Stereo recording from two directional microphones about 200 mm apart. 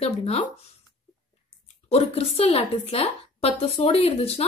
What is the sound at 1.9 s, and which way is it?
A woman's voice, 30° left (ahead or behind).